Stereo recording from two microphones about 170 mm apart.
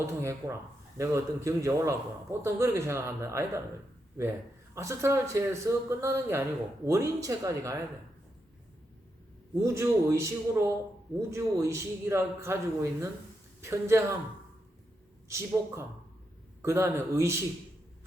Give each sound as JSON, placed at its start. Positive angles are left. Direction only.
{"t": 0.0, "sound": "a man's voice", "side_deg": -15}
{"t": 4.7, "sound": "a man's voice", "side_deg": -15}
{"t": 9.7, "sound": "a man's voice", "side_deg": -15}
{"t": 15.3, "sound": "a man's voice", "side_deg": -15}